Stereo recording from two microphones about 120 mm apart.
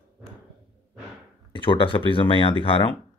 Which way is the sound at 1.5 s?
45° left (ahead or behind).